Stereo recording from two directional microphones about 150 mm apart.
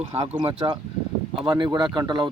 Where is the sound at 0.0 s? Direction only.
50° right (ahead or behind).